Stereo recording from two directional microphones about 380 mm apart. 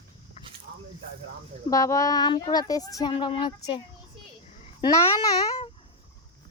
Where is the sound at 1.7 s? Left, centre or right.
Centre.